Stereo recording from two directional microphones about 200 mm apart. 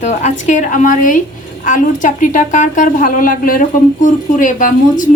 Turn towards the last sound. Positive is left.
turn(degrees=40)  # may be behind; listen again after turning